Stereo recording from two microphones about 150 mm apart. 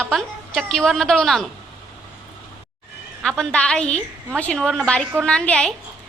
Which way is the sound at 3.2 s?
5° left (ahead or behind).